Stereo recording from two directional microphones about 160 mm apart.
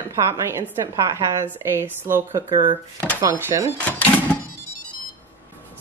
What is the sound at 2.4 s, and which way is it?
Speech, 30° right (ahead or behind).